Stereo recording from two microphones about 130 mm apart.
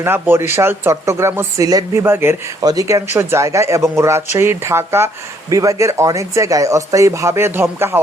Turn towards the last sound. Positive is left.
turn(degrees=-20)  # may be behind; listen again after turning